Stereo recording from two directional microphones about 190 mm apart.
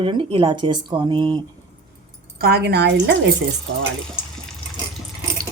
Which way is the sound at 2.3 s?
55° right (ahead or behind).